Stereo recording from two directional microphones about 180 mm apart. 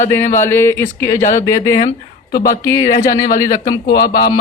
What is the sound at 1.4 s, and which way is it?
Speech, 20° left (ahead or behind).